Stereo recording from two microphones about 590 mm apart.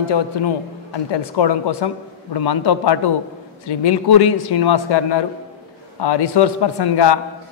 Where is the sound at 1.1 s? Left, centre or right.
Left.